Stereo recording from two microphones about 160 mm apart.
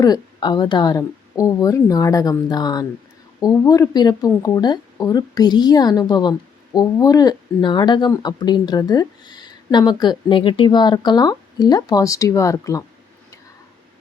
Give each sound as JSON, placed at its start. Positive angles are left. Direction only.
{"t": 0.0, "sound": "speech", "side_deg": 25}